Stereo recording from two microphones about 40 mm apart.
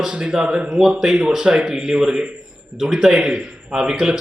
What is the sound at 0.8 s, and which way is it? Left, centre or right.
Speech, centre.